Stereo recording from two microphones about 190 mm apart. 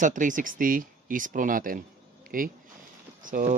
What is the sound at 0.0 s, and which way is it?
Speech, 45° right (ahead or behind).